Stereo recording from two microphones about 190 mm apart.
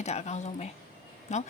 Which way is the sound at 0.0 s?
35° left (ahead or behind).